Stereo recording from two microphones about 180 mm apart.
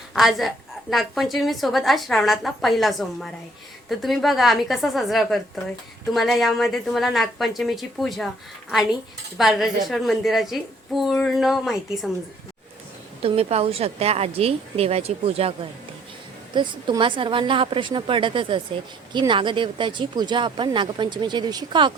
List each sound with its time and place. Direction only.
0.1 s a woman's voice: centre (ahead or behind)
9.4 s a woman's voice: centre (ahead or behind)
13.2 s a woman's voice: 35° right (ahead or behind)